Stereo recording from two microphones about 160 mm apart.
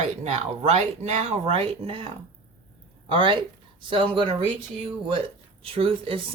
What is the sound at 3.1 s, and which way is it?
Speech, 30° right (ahead or behind).